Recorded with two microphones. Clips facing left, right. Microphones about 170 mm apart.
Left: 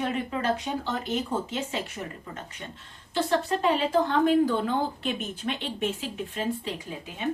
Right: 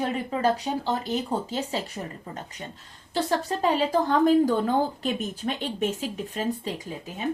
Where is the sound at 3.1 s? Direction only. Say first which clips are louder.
Even; 40° right (ahead or behind).